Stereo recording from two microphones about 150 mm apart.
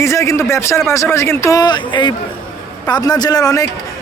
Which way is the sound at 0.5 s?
20° left (ahead or behind).